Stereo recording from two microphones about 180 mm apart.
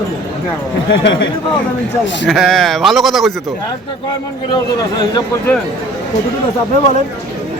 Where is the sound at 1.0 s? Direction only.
90° left.